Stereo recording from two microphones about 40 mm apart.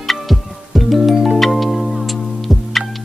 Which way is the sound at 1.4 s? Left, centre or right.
Centre.